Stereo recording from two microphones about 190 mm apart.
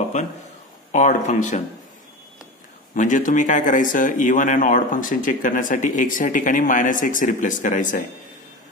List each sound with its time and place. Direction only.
0.2 s speech: 40° left (ahead or behind)
2.9 s speech: 40° left (ahead or behind)